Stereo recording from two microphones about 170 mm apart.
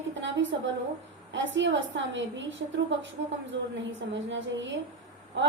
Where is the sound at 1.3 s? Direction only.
90° right.